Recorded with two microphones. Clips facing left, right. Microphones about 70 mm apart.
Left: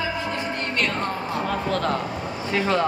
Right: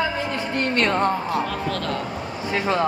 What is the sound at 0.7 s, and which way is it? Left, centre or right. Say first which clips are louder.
Speech: right 6 dB; right.